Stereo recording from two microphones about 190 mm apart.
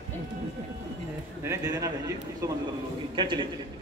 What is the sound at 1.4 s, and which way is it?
A man's voice, 20° right (ahead or behind).